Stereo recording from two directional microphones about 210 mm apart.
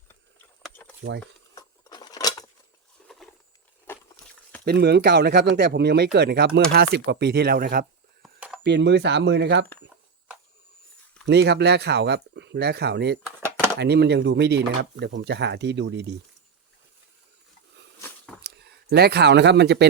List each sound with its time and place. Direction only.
1.1 s speech: 60° right (ahead or behind)
1.5 s a sound: 20° left (ahead or behind)
3.0 s patter: centre (ahead or behind)
3.9 s a sound: 10° left (ahead or behind)
4.6 s speech: 50° right (ahead or behind)
8.2 s a sound: centre (ahead or behind)
8.6 s speech: 55° right (ahead or behind)
11.3 s speech: 55° right (ahead or behind)
18.4 s speech: 50° right (ahead or behind)